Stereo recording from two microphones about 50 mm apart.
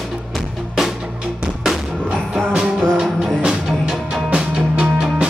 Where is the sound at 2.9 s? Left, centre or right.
Centre.